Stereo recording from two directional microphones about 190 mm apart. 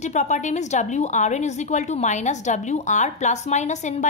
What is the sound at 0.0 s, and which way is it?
A woman's voice, 40° left (ahead or behind).